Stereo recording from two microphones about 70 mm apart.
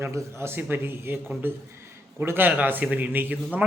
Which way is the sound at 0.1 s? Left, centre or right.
Right.